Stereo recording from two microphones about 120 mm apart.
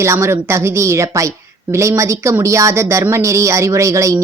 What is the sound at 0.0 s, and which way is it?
Speech, 25° right (ahead or behind).